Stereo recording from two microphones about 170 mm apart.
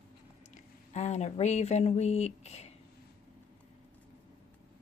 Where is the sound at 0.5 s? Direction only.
40° left (ahead or behind).